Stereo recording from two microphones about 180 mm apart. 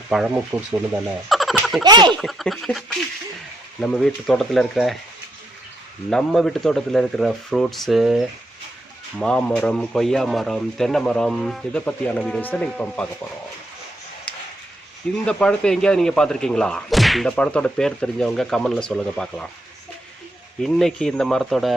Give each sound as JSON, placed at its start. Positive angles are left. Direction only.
{"t": 0.1, "sound": "speech", "side_deg": -5}
{"t": 1.3, "sound": "a sound", "side_deg": 0}
{"t": 1.8, "sound": "speech", "side_deg": -25}
{"t": 2.1, "sound": "speech", "side_deg": 0}
{"t": 6.1, "sound": "speech", "side_deg": 5}
{"t": 15.3, "sound": "speech", "side_deg": 5}
{"t": 20.6, "sound": "speech", "side_deg": 0}